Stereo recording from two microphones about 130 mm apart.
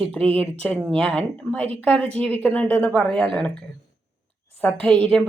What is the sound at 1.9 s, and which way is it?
Speech, 50° right (ahead or behind).